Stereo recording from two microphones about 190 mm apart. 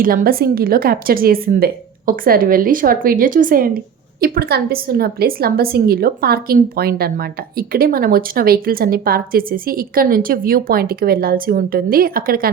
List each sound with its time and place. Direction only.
0.0 s a woman's voice: 50° right (ahead or behind)